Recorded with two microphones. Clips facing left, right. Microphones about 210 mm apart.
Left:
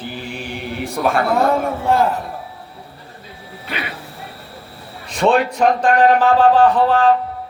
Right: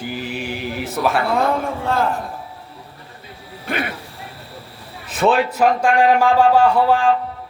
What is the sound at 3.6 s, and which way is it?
Speech, 50° right (ahead or behind).